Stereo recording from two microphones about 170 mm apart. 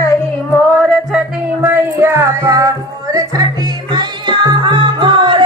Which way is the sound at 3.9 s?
25° right (ahead or behind).